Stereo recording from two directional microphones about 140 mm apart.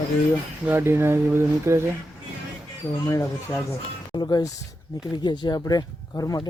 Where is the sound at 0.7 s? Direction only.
15° right (ahead or behind).